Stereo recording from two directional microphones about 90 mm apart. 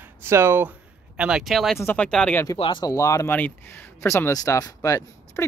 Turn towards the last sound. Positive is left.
turn(degrees=35)  # may be behind; listen again after turning